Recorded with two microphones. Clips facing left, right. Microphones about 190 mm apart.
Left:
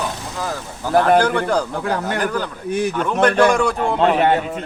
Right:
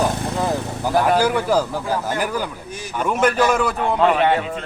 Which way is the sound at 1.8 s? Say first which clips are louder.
Left 1 dB; 65° left (ahead or behind).